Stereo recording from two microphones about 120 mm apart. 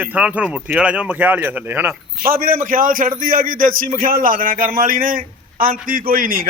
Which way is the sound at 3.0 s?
90° right.